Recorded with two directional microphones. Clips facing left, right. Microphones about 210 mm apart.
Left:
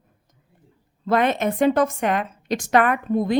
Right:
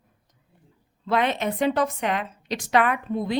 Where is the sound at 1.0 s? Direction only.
45° left (ahead or behind).